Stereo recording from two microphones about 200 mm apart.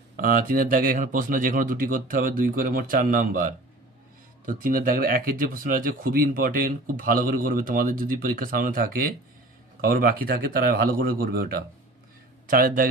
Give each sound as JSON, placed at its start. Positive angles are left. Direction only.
{"t": 0.1, "sound": "speech", "side_deg": -45}